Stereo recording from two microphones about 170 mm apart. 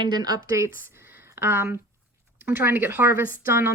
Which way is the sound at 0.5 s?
15° right (ahead or behind).